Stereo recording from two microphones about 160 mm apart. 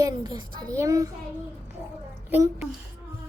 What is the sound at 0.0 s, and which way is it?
A child's voice, 25° right (ahead or behind).